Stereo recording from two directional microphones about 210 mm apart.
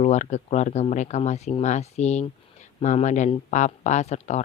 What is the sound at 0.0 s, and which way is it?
Speech, 35° left (ahead or behind).